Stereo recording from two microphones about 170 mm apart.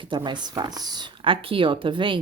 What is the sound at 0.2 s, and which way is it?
Speech, 25° right (ahead or behind).